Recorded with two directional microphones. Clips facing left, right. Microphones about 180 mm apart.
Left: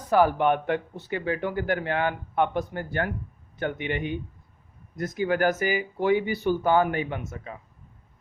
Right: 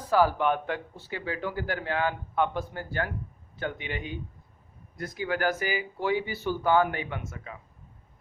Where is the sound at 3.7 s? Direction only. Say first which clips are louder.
Left 7 dB; 55° left (ahead or behind).